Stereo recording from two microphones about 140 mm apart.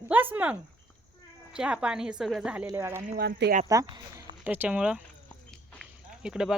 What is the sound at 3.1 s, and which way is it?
Speech, 75° right (ahead or behind).